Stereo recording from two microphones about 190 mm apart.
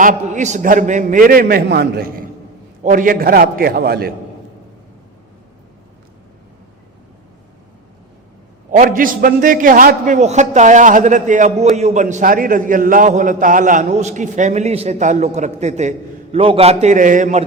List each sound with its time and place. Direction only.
0.0 s a man's voice: 40° right (ahead or behind)
8.7 s a man's voice: 45° right (ahead or behind)